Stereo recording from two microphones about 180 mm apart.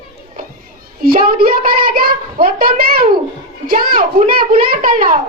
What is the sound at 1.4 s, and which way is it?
A child's voice, 55° right (ahead or behind).